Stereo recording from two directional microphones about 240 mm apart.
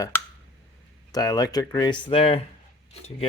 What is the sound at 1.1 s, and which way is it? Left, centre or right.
Speech, centre.